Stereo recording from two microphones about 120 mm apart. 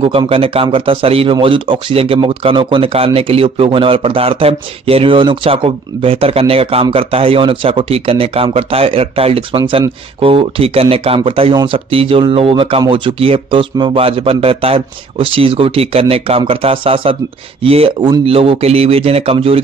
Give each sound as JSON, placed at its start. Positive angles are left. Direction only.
{"t": 0.0, "sound": "speech", "side_deg": -50}